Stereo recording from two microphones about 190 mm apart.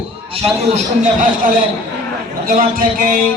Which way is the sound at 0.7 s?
45° right (ahead or behind).